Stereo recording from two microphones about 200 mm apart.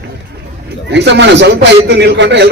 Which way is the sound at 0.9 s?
60° right (ahead or behind).